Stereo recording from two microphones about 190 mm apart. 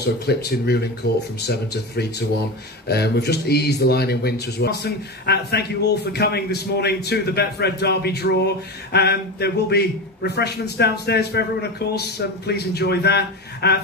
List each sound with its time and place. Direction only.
0.0 s speech: 60° left (ahead or behind)